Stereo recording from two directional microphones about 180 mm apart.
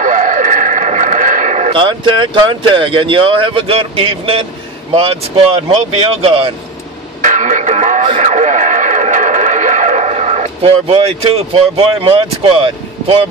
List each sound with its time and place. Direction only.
0.0 s a sound: 45° right (ahead or behind)
1.8 s speech: 25° right (ahead or behind)
6.2 s speech: 30° right (ahead or behind)
7.2 s radio: 45° right (ahead or behind)